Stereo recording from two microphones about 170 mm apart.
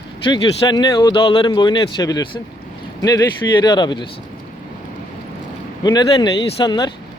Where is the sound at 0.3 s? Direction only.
25° left (ahead or behind).